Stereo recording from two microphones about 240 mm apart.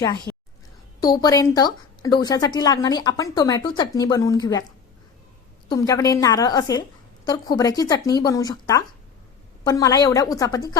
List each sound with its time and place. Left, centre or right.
0.3 s a sound: centre
1.0 s speech: centre
5.6 s speech: centre